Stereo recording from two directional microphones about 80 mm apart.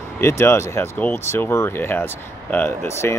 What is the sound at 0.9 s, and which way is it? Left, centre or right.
Speech, centre.